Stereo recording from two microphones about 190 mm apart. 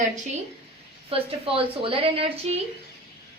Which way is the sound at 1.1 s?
30° right (ahead or behind).